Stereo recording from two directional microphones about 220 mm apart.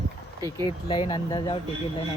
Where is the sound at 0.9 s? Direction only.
20° left (ahead or behind).